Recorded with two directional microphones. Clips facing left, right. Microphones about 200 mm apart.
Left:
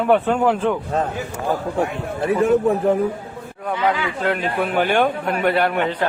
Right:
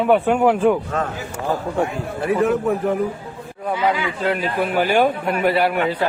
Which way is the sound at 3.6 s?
5° right (ahead or behind).